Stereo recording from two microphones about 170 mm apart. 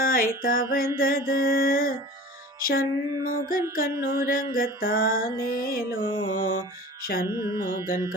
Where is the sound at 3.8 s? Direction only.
60° left (ahead or behind).